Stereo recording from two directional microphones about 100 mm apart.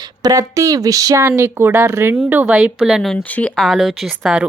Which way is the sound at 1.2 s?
25° right (ahead or behind).